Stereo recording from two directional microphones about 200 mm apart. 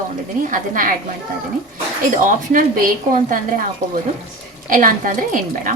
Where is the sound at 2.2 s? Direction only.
45° right (ahead or behind).